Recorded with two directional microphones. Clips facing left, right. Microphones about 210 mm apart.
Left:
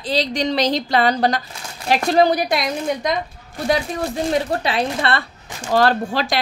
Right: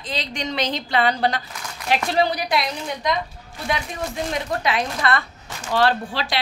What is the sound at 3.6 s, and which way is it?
A woman's voice, 35° left (ahead or behind).